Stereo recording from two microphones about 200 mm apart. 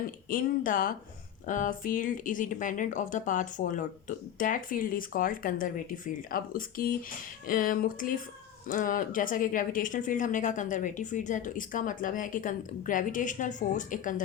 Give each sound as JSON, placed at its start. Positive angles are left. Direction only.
{"t": 0.3, "sound": "speech", "side_deg": 45}